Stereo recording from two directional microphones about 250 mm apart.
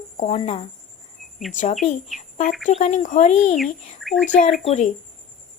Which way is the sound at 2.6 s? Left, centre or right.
Left.